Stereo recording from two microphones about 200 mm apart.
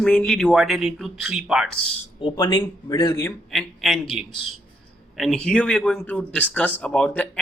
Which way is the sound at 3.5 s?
Centre (ahead or behind).